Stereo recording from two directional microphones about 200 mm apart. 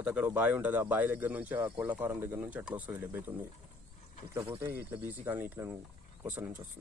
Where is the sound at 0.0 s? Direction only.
10° right (ahead or behind).